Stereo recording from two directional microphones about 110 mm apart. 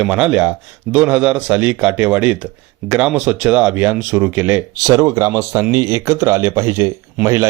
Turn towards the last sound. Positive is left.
turn(degrees=-30)  # may be behind; listen again after turning